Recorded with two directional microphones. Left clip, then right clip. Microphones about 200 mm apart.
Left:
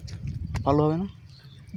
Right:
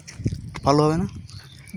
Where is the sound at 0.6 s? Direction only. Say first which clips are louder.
Right 4 dB; 10° right (ahead or behind).